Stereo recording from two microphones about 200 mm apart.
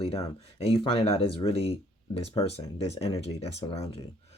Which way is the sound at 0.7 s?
30° left (ahead or behind).